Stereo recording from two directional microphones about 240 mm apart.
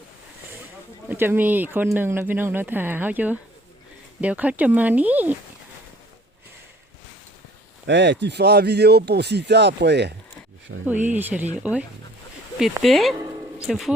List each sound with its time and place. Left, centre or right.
1.1 s speech: centre
7.9 s speech: right
10.8 s speech: centre
13.1 s a sound: centre